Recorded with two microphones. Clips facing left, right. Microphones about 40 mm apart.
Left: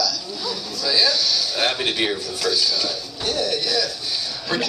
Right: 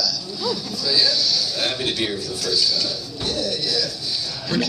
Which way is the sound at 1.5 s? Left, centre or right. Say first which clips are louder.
Left 2 dB; left.